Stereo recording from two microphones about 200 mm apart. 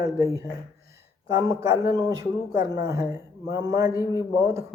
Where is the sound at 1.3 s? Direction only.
15° right (ahead or behind).